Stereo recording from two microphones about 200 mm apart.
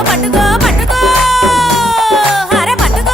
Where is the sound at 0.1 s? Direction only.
Centre (ahead or behind).